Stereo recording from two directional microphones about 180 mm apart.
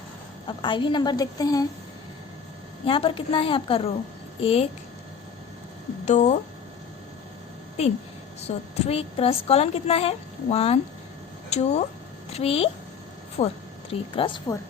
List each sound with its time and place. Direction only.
0.4 s a woman's voice: 25° left (ahead or behind)
2.8 s a woman's voice: 30° left (ahead or behind)
6.1 s a woman's voice: 40° left (ahead or behind)
8.4 s a woman's voice: 35° left (ahead or behind)
14.2 s a woman's voice: 25° left (ahead or behind)